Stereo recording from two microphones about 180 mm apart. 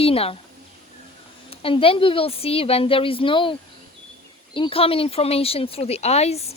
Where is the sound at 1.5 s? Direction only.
30° left (ahead or behind).